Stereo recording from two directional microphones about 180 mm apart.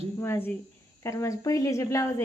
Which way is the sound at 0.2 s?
15° left (ahead or behind).